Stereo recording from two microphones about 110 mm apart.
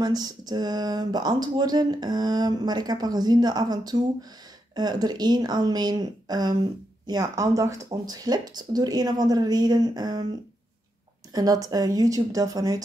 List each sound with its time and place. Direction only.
0.0 s speech: 35° right (ahead or behind)
11.3 s speech: 35° right (ahead or behind)